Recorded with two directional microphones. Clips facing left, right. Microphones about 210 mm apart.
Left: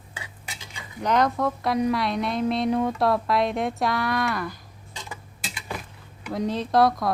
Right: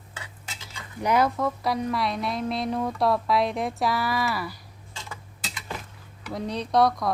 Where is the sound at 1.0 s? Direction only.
5° right (ahead or behind).